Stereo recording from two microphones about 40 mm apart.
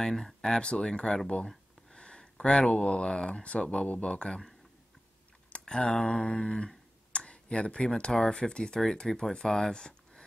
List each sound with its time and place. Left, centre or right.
0.0 s speech: centre
5.7 s speech: centre